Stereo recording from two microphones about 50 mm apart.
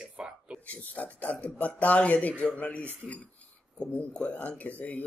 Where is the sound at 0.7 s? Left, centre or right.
Left.